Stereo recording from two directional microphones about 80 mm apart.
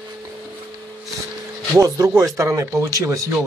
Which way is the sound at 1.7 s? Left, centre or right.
Right.